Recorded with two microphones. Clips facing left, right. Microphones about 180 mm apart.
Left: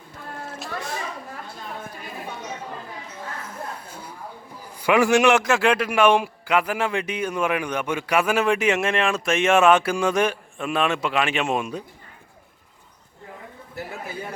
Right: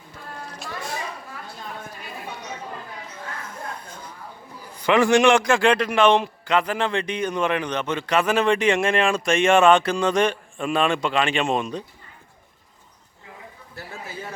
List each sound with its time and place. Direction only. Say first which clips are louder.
3.8 s a sound: left 1 dB; 10° left (ahead or behind)
4.8 s a man's voice: right 1 dB; 10° left (ahead or behind)
14.1 s chatter: left 2 dB; 15° left (ahead or behind)